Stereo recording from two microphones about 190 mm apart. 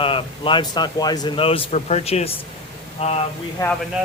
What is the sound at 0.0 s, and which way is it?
A man's voice, 25° left (ahead or behind).